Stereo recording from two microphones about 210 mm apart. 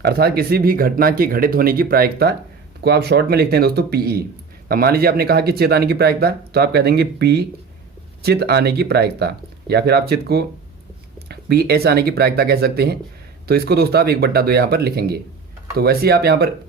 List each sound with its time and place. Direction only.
0.0 s speech: 50° right (ahead or behind)